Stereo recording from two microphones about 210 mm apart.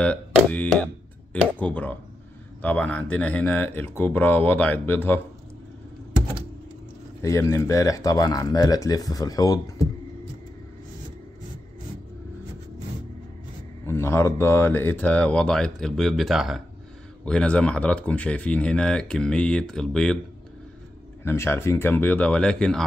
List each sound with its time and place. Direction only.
0.0 s speech: 5° left (ahead or behind)
7.2 s speech: 15° left (ahead or behind)
13.8 s speech: 10° left (ahead or behind)
21.2 s speech: 10° left (ahead or behind)